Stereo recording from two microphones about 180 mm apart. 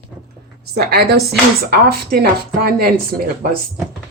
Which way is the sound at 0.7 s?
60° right (ahead or behind).